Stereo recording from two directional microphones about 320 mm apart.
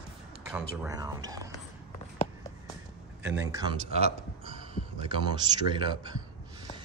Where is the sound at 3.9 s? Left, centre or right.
Centre.